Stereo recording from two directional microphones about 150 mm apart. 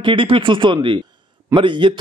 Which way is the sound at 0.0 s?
35° right (ahead or behind).